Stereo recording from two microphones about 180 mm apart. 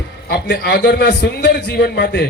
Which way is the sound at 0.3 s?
65° left (ahead or behind).